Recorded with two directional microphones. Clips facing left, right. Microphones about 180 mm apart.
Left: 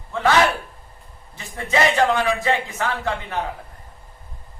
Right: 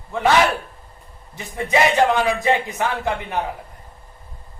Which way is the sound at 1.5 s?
15° right (ahead or behind).